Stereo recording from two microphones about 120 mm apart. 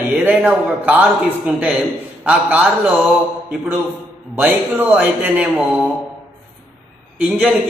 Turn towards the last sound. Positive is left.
turn(degrees=-10)  # may be behind; listen again after turning